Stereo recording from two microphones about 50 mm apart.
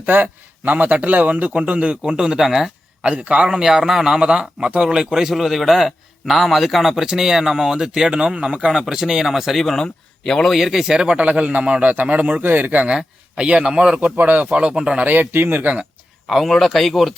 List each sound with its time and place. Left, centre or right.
0.0 s a man's voice: right; by 2.6 s centre
3.0 s a man's voice: right; by 9.7 s centre
9.7 s speech: centre
10.5 s a man's voice: centre
11.3 s a man's voice: right
12.4 s a man's voice: right
12.9 s a man's voice: centre
14.9 s a man's voice: right
16.2 s speech: centre